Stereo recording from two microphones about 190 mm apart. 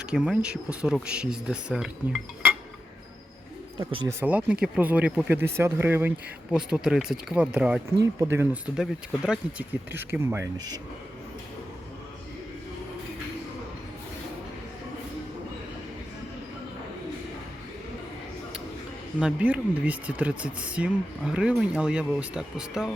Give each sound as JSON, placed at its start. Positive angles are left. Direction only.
{"t": 0.0, "sound": "speech", "side_deg": -5}
{"t": 3.8, "sound": "speech", "side_deg": -25}
{"t": 4.2, "sound": "speech", "side_deg": -5}
{"t": 8.7, "sound": "speech", "side_deg": -5}
{"t": 19.2, "sound": "speech", "side_deg": -5}